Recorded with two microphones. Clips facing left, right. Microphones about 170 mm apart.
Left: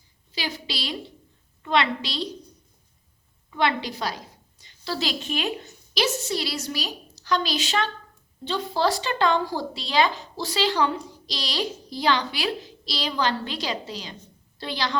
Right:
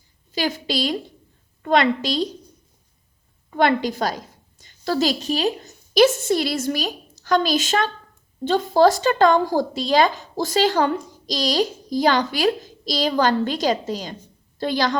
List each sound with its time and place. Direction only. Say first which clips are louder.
0.3 s speech: right 8 dB; 45° right (ahead or behind)
3.5 s a woman's voice: right 6 dB; 45° right (ahead or behind)